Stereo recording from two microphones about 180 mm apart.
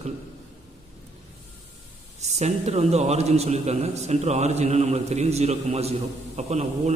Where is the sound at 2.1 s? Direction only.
40° right (ahead or behind).